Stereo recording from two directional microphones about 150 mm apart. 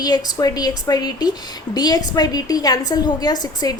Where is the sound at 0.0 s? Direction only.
25° left (ahead or behind).